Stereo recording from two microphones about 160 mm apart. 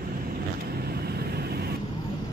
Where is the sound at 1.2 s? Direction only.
80° right.